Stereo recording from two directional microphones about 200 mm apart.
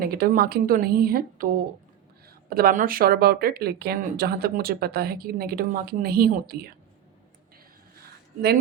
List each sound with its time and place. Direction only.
0.0 s speech: 50° right (ahead or behind)
2.5 s speech: 50° right (ahead or behind)